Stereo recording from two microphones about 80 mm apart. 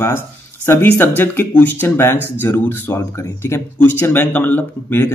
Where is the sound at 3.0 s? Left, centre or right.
Left.